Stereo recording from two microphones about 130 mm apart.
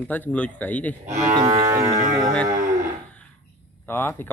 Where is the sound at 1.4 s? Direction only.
25° right (ahead or behind).